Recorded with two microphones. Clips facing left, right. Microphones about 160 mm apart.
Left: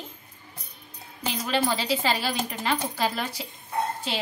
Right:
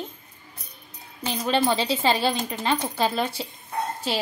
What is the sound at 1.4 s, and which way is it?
Speech, 25° right (ahead or behind).